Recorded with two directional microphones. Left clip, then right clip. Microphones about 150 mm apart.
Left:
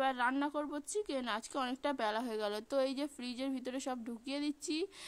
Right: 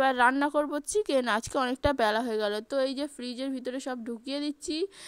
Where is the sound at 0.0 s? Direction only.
40° right (ahead or behind).